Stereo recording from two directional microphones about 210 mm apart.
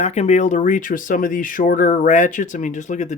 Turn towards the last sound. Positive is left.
turn(degrees=35)  # may be behind; listen again after turning